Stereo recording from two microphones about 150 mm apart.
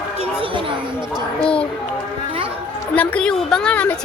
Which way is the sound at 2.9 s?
10° left (ahead or behind).